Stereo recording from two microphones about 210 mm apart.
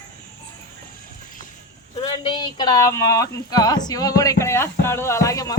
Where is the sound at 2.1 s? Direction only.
20° left (ahead or behind).